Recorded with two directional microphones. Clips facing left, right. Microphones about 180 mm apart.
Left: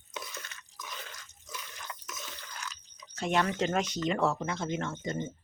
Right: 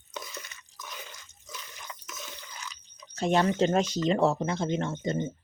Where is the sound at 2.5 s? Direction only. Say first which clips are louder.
Even; 10° right (ahead or behind).